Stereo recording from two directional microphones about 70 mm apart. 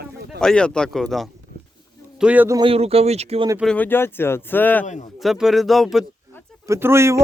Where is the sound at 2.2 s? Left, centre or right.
Centre.